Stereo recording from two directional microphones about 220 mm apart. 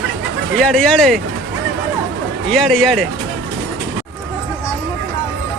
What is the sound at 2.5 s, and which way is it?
Speech, centre (ahead or behind).